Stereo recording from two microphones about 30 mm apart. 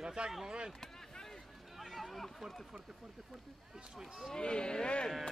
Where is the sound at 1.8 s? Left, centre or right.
Centre.